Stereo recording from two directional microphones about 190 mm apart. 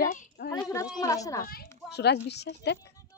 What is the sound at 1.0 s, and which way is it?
Speech, 15° left (ahead or behind).